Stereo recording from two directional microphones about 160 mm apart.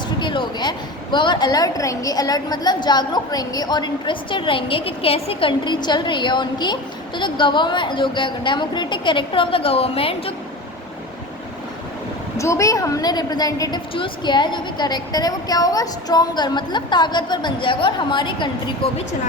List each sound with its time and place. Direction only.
0.2 s a woman's voice: 30° left (ahead or behind)
12.4 s a woman's voice: 20° left (ahead or behind)